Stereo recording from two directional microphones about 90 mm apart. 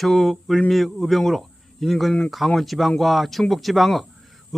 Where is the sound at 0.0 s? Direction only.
Centre (ahead or behind).